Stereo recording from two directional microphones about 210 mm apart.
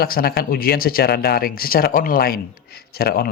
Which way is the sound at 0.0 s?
45° left (ahead or behind).